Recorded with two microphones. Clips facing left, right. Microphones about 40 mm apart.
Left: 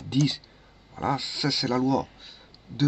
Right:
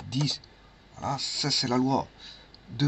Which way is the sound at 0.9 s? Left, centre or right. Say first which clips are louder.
Left 4 dB; left.